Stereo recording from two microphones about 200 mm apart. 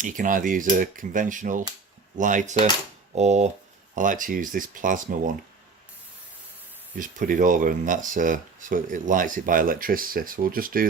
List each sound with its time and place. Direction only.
0.0 s speech: 40° right (ahead or behind)
7.0 s speech: 40° right (ahead or behind)